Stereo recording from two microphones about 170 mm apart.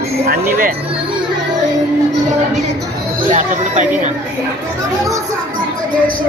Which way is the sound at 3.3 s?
45° right (ahead or behind).